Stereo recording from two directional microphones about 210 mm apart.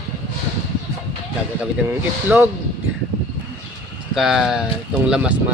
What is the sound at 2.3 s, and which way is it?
Speech, 5° right (ahead or behind).